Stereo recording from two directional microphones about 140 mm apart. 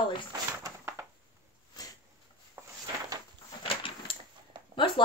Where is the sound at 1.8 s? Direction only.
30° left (ahead or behind).